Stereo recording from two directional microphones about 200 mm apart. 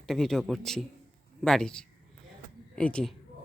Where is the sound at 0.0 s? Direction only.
Centre (ahead or behind).